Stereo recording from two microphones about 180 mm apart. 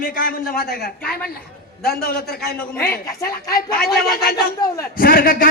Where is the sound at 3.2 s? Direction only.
20° left (ahead or behind).